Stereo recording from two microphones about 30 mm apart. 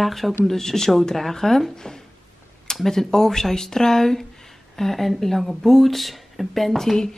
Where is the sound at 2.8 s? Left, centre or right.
Centre.